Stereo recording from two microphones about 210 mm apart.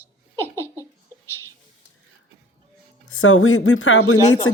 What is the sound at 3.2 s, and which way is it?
Speech, 80° left.